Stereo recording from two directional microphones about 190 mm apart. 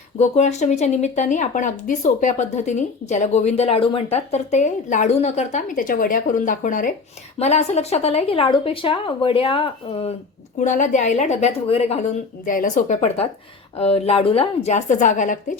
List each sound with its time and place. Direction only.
0.2 s speech: 35° left (ahead or behind)